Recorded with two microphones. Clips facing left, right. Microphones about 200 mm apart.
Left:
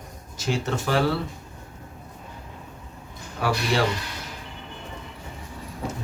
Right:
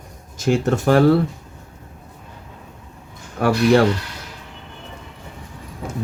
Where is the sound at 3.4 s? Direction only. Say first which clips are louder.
Right 7 dB; 55° right (ahead or behind).